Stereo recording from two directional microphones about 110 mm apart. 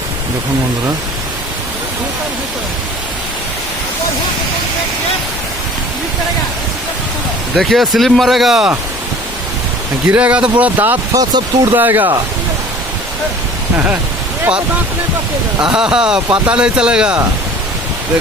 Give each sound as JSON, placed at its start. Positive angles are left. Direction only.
{"t": 7.5, "sound": "speech", "side_deg": 0}
{"t": 10.1, "sound": "speech", "side_deg": -10}
{"t": 11.1, "sound": "speech", "side_deg": -35}
{"t": 11.7, "sound": "speech", "side_deg": -15}
{"t": 15.7, "sound": "speech", "side_deg": -5}